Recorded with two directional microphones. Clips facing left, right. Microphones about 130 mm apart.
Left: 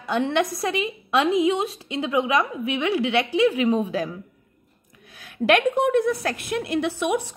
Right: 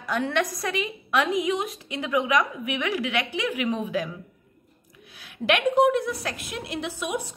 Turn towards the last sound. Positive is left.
turn(degrees=55)  # may be behind; listen again after turning